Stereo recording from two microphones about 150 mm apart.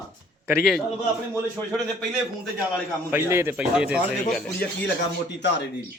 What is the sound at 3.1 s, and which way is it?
Speech, 15° right (ahead or behind).